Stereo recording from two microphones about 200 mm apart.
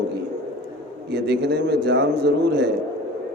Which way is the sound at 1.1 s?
55° right (ahead or behind).